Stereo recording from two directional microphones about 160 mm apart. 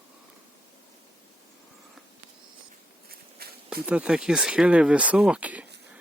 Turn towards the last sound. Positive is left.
turn(degrees=-10)  # may be behind; listen again after turning